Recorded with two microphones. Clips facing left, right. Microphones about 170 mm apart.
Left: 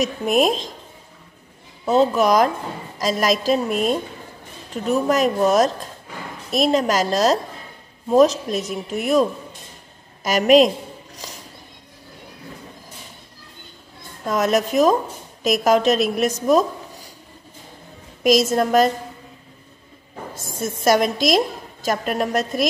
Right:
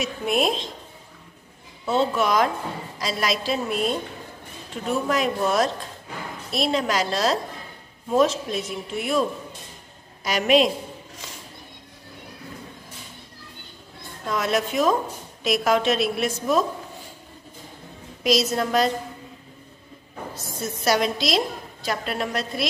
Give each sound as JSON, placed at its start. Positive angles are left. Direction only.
{"t": 0.0, "sound": "a woman's voice", "side_deg": 45}
{"t": 1.9, "sound": "a woman's voice", "side_deg": 40}
{"t": 10.2, "sound": "a woman's voice", "side_deg": 45}
{"t": 14.2, "sound": "a woman's voice", "side_deg": 45}
{"t": 18.2, "sound": "a woman's voice", "side_deg": 50}
{"t": 20.3, "sound": "a woman's voice", "side_deg": 50}